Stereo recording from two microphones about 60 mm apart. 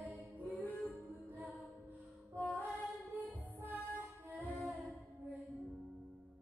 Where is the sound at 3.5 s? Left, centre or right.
Right.